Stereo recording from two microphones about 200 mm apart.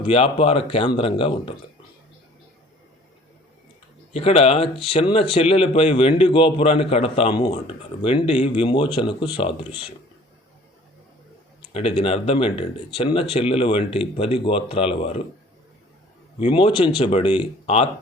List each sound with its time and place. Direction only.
0.0 s speech: 30° left (ahead or behind)
4.1 s speech: 30° left (ahead or behind)
11.7 s speech: 30° left (ahead or behind)
16.4 s speech: 25° left (ahead or behind)